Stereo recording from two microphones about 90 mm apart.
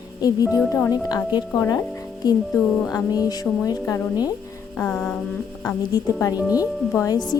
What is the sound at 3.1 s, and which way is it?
Speech, 45° left (ahead or behind).